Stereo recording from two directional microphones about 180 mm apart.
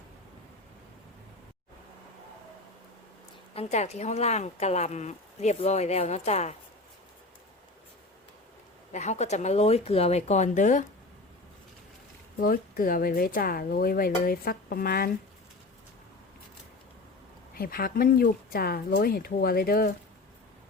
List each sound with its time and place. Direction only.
3.5 s speech: 35° left (ahead or behind)
8.9 s speech: 40° left (ahead or behind)
12.4 s speech: 50° left (ahead or behind)
17.5 s speech: 55° left (ahead or behind)